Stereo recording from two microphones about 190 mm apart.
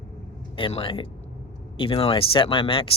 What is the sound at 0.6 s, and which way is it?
Speech, 30° left (ahead or behind).